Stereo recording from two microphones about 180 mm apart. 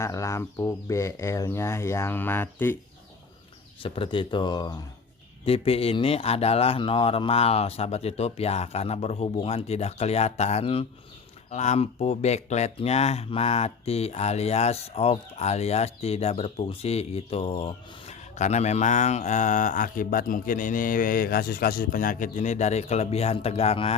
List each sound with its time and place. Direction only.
0.0 s speech: 15° left (ahead or behind)
3.8 s speech: 30° left (ahead or behind)